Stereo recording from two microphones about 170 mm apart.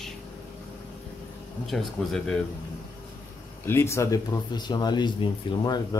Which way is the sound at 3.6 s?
15° left (ahead or behind).